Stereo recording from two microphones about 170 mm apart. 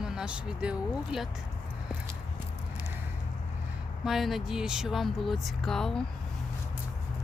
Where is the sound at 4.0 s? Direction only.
Centre (ahead or behind).